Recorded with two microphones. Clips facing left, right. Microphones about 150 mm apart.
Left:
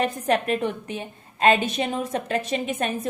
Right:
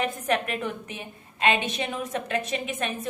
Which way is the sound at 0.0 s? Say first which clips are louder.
Left 4 dB; 35° left (ahead or behind).